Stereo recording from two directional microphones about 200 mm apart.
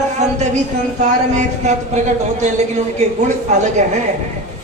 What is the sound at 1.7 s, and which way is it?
Speech, 35° right (ahead or behind).